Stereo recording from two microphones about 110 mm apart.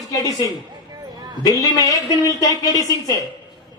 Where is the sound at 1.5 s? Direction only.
35° left (ahead or behind).